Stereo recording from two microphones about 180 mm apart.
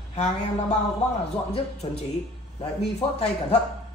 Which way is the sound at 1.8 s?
25° left (ahead or behind).